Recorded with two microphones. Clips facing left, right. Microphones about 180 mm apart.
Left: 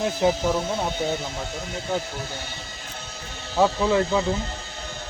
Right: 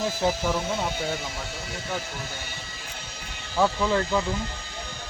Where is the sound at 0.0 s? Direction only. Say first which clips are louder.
Left 4 dB; 25° left (ahead or behind).